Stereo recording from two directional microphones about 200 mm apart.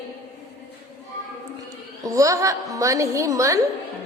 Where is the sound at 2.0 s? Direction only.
15° right (ahead or behind).